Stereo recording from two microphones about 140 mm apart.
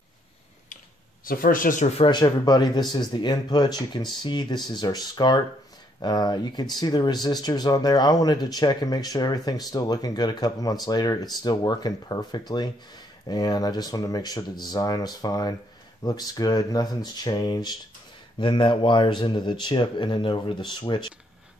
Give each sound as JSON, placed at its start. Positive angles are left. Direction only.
{"t": 1.2, "sound": "speech", "side_deg": 90}
{"t": 2.0, "sound": "speech", "side_deg": 30}